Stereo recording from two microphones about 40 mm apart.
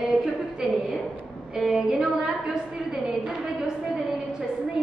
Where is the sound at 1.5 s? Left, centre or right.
Centre.